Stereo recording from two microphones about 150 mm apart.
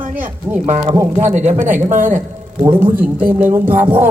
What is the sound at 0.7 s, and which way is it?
Speech, 40° right (ahead or behind).